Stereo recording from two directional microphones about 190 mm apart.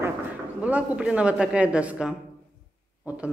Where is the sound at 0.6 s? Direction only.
5° right (ahead or behind).